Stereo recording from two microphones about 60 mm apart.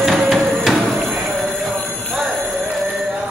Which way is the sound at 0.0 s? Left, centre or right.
Centre.